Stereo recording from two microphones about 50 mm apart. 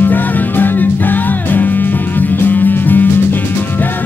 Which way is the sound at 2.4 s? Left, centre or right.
Left.